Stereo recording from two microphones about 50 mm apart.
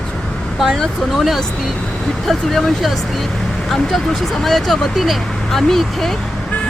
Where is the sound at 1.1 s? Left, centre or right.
Centre.